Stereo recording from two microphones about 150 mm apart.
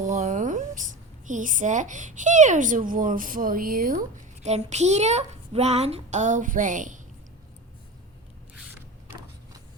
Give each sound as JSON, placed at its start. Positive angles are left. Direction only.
{"t": 0.0, "sound": "a woman's voice", "side_deg": -60}
{"t": 4.4, "sound": "speech", "side_deg": -50}